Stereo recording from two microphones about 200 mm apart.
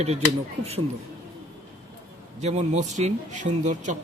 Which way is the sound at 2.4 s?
35° right (ahead or behind).